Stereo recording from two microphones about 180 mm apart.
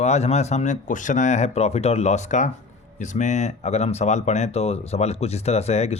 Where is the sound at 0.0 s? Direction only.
35° left (ahead or behind).